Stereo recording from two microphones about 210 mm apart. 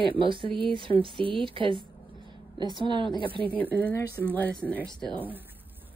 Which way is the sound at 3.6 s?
5° left (ahead or behind).